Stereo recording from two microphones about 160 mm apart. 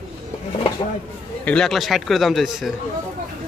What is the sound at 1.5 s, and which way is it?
Speech, 5° left (ahead or behind).